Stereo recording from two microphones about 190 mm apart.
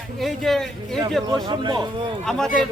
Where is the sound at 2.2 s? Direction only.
5° left (ahead or behind).